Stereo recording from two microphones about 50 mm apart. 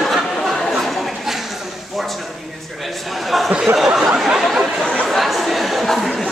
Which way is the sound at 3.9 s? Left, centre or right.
Centre.